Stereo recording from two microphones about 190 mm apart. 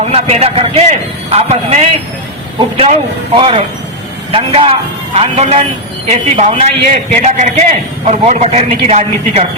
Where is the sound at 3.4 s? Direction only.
30° right (ahead or behind).